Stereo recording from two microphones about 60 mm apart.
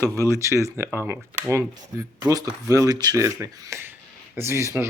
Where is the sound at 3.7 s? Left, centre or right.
Right.